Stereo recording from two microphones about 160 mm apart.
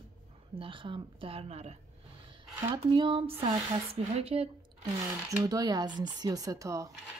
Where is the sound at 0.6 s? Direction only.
30° right (ahead or behind).